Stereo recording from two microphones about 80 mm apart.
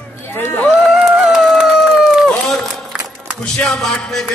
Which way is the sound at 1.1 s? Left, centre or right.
Centre.